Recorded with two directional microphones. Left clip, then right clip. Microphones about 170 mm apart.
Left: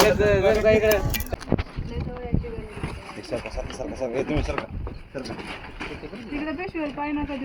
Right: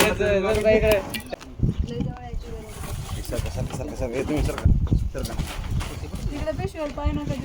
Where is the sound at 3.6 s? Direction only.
15° right (ahead or behind).